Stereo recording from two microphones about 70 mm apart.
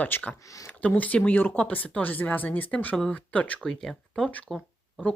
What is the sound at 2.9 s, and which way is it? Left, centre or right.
Speech, centre.